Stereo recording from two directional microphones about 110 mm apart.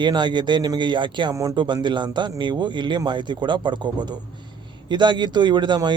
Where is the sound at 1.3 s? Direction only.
30° right (ahead or behind).